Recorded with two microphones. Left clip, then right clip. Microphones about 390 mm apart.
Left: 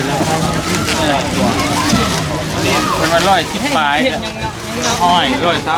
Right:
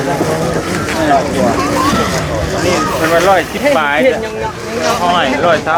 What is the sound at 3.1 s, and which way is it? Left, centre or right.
Speech, left.